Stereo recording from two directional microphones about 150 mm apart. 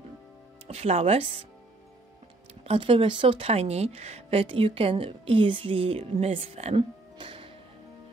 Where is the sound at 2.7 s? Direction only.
35° right (ahead or behind).